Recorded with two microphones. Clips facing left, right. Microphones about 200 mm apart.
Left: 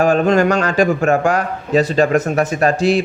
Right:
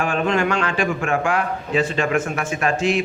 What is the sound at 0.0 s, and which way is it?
A man's voice, 40° left (ahead or behind).